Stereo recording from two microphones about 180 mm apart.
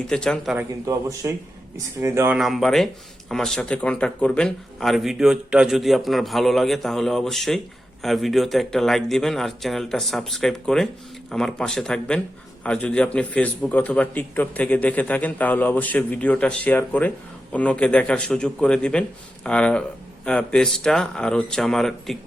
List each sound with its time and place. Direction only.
0.1 s speech: 5° left (ahead or behind)
0.9 s speech: 20° right (ahead or behind)
2.4 s a man's voice: centre (ahead or behind)